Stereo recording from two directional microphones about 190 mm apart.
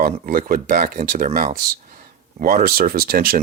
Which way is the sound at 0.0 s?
50° right (ahead or behind).